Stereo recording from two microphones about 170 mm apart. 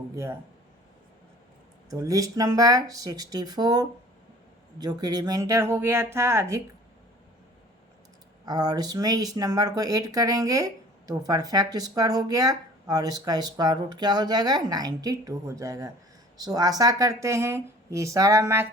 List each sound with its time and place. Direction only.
1.9 s speech: 20° right (ahead or behind)
8.4 s speech: 25° right (ahead or behind)